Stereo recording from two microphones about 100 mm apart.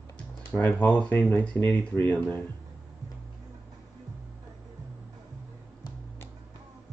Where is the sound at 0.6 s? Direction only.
15° left (ahead or behind).